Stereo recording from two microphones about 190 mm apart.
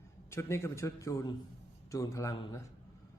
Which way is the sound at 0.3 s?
15° left (ahead or behind).